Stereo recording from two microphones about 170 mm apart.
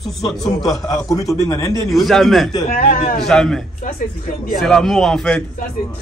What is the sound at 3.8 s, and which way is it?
Speech, 55° left (ahead or behind).